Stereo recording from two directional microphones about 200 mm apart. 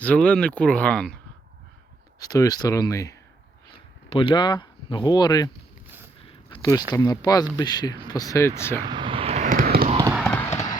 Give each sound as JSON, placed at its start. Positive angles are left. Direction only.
{"t": 0.0, "sound": "speech", "side_deg": 5}
{"t": 2.1, "sound": "speech", "side_deg": 20}
{"t": 6.2, "sound": "a sound", "side_deg": 25}
{"t": 6.9, "sound": "speech", "side_deg": 20}
{"t": 8.8, "sound": "vehicle", "side_deg": -25}
{"t": 10.2, "sound": "horse", "side_deg": 10}